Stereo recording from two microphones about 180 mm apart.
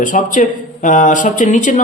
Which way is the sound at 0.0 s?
45° left (ahead or behind).